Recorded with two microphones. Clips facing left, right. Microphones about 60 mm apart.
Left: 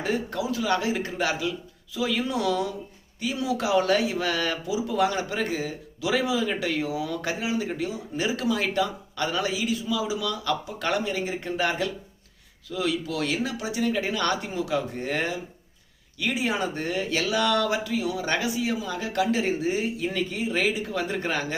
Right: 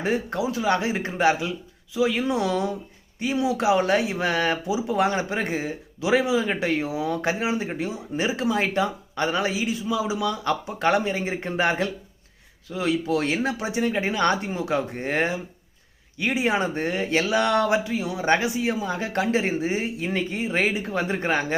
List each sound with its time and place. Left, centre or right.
0.0 s speech: right